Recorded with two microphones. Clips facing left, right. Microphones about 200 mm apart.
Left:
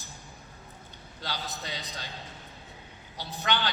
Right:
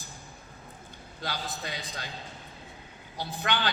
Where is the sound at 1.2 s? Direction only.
50° right (ahead or behind).